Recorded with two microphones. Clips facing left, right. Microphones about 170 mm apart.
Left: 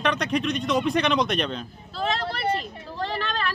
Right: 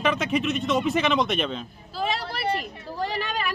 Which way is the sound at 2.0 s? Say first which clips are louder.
Left 1 dB; 10° right (ahead or behind).